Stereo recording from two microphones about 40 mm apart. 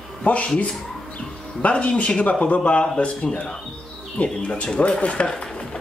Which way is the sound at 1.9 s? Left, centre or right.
Left.